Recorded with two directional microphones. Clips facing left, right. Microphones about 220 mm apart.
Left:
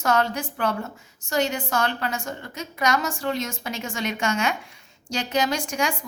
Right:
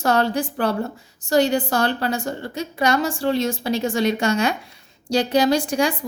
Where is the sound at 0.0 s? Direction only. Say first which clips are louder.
Right 4 dB; 35° right (ahead or behind).